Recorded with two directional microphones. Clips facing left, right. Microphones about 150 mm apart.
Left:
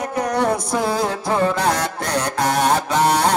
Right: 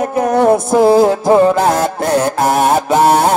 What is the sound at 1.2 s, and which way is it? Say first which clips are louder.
Speech: right 10 dB; 20° right (ahead or behind).